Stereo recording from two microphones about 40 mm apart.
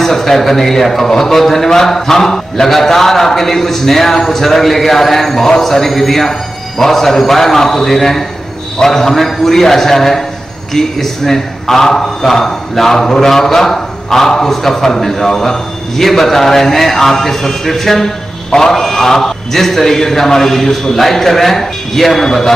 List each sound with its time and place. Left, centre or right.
0.0 s a man's voice: centre